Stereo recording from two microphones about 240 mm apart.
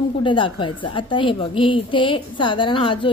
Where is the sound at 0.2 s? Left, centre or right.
Left.